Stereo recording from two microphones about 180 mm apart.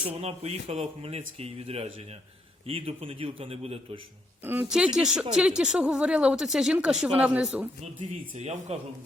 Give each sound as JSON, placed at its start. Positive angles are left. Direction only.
{"t": 0.1, "sound": "a man's voice", "side_deg": -35}
{"t": 4.4, "sound": "speech", "side_deg": -10}
{"t": 8.7, "sound": "a man's voice", "side_deg": -35}